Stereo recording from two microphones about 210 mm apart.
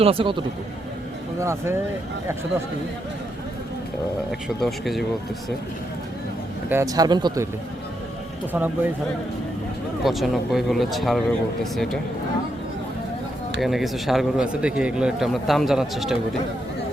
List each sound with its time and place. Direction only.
0.0 s a man's voice: 25° right (ahead or behind)
1.4 s speech: 15° right (ahead or behind)
4.3 s a man's voice: centre (ahead or behind)
6.7 s speech: 15° right (ahead or behind)
8.5 s speech: 10° right (ahead or behind)
10.0 s a man's voice: centre (ahead or behind)
13.6 s a man's voice: centre (ahead or behind)